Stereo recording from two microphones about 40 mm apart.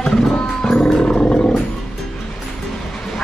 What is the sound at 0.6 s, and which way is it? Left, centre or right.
Music, centre.